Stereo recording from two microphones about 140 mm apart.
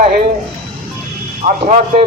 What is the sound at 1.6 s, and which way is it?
Speech, 70° right (ahead or behind).